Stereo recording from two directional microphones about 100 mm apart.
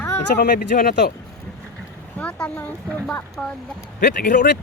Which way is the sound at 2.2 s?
10° left (ahead or behind).